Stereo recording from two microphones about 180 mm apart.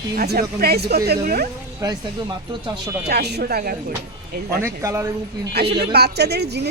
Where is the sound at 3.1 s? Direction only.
65° right (ahead or behind).